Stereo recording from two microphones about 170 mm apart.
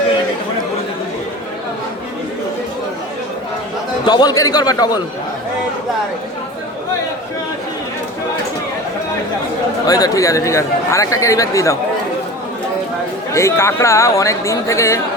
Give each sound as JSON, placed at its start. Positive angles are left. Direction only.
{"t": 4.0, "sound": "speech", "side_deg": 25}
{"t": 9.8, "sound": "speech", "side_deg": 20}
{"t": 13.3, "sound": "speech", "side_deg": 15}